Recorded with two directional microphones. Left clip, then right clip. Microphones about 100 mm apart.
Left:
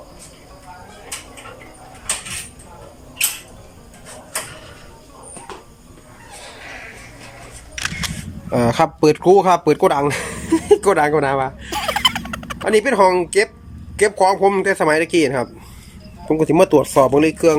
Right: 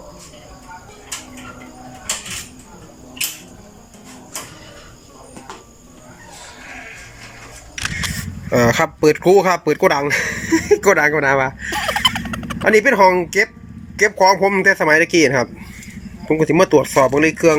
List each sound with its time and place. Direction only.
7.8 s single-lens reflex camera: centre (ahead or behind)
12.8 s speech: centre (ahead or behind)
16.3 s speech: 20° left (ahead or behind)